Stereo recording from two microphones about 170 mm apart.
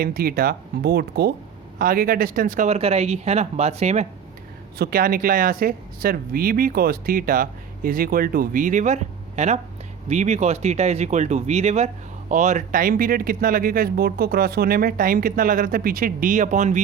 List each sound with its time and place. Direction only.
0.0 s speech: 60° right (ahead or behind)
1.8 s speech: 60° right (ahead or behind)
2.6 s speech: 35° right (ahead or behind)
4.8 s speech: 60° right (ahead or behind)